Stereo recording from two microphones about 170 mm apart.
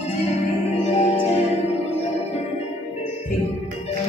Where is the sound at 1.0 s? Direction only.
40° left (ahead or behind).